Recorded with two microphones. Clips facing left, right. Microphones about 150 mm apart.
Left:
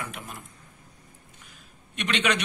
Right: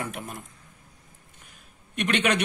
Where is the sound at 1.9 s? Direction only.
50° right (ahead or behind).